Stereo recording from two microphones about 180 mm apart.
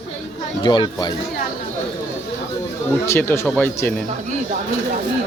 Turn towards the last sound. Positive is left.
turn(degrees=10)  # may be behind; listen again after turning